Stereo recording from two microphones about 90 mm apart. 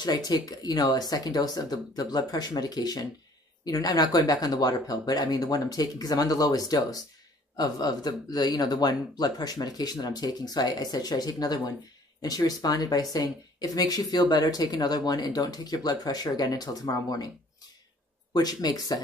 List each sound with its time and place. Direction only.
0.0 s speech: 50° left (ahead or behind)
18.3 s speech: 45° left (ahead or behind)